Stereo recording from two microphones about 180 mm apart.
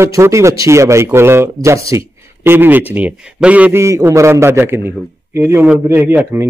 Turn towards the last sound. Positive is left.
turn(degrees=-10)  # may be behind; listen again after turning